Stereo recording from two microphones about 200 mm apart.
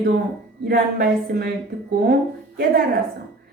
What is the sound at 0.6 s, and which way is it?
Speech, 50° right (ahead or behind).